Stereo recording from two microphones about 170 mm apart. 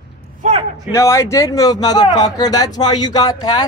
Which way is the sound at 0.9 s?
15° left (ahead or behind).